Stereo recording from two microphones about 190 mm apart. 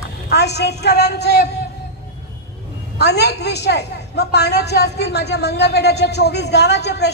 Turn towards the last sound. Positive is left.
turn(degrees=60)  # may be behind; listen again after turning